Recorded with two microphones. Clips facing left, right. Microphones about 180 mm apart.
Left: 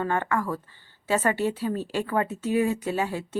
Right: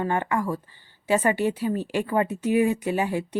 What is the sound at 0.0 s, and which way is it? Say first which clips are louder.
Speech: right 1 dB; 15° right (ahead or behind).